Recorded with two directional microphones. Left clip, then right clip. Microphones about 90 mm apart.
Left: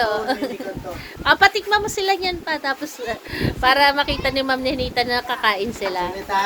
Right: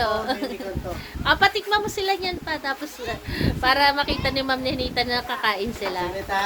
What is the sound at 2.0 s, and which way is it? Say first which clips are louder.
A woman's voice: left 4 dB; 65° left (ahead or behind).